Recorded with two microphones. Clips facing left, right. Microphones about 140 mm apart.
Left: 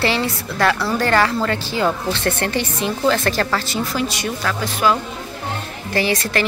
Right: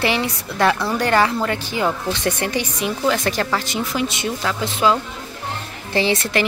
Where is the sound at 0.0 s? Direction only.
15° right (ahead or behind).